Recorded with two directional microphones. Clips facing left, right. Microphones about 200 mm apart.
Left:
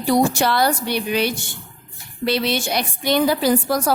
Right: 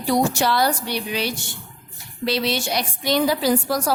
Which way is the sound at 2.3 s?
55° left (ahead or behind).